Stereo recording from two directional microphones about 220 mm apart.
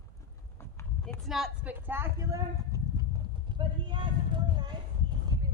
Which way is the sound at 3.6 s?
20° right (ahead or behind).